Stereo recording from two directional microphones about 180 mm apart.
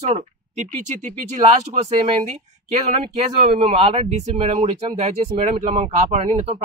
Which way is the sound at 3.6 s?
35° right (ahead or behind).